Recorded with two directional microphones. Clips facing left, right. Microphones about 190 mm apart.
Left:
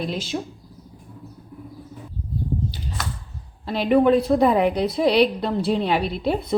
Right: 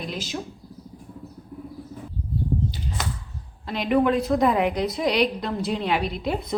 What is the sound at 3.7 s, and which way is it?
A woman's voice, 30° left (ahead or behind).